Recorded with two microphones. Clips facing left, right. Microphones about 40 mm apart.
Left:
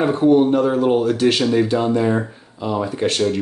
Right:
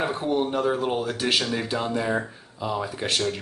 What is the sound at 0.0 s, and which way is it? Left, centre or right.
Speech, centre.